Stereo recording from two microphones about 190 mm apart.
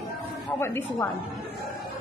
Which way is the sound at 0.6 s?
15° left (ahead or behind).